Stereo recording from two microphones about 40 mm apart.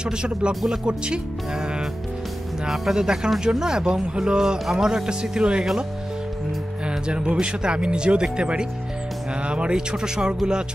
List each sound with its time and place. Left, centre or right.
0.0 s speech: right
2.7 s speech: centre
6.9 s speech: right